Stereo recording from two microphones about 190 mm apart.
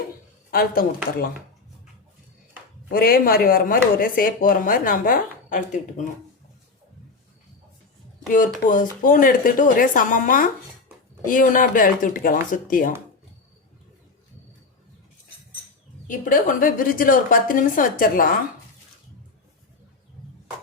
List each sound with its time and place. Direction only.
0.5 s speech: 50° left (ahead or behind)
2.9 s speech: 50° left (ahead or behind)
8.3 s speech: 45° left (ahead or behind)
16.0 s speech: 45° left (ahead or behind)